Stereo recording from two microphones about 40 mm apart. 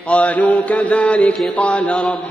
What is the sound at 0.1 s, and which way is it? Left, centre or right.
A man's voice, left.